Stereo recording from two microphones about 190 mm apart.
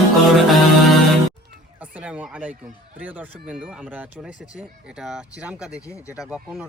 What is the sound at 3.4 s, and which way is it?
Music, 5° right (ahead or behind).